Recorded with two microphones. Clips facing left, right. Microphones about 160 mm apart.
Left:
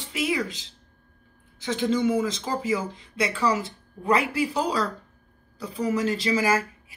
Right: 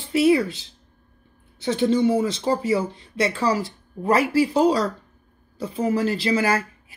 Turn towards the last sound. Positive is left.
turn(degrees=-30)  # may be behind; listen again after turning